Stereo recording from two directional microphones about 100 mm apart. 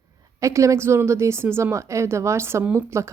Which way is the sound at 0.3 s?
30° right (ahead or behind).